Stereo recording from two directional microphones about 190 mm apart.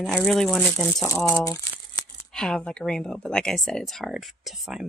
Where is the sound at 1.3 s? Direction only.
15° left (ahead or behind).